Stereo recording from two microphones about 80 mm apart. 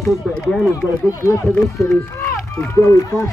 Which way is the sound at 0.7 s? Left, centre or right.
Left.